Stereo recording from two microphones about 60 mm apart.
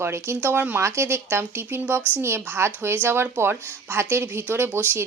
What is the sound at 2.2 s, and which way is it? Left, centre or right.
Speech, right.